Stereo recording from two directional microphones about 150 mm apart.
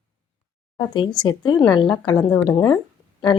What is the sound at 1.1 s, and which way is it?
A woman's voice, 30° left (ahead or behind).